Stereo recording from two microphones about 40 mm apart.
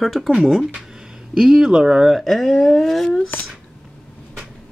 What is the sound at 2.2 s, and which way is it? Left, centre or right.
Speech, centre.